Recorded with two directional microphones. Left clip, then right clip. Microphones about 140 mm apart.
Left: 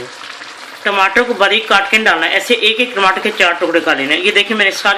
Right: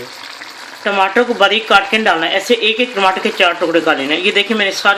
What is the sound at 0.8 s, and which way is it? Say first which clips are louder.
Speech: left 1 dB; 45° right (ahead or behind).